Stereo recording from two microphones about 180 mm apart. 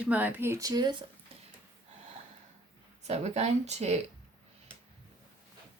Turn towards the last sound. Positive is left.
turn(degrees=-35)  # may be behind; listen again after turning